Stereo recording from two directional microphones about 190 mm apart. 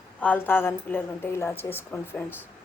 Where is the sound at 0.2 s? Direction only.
10° left (ahead or behind).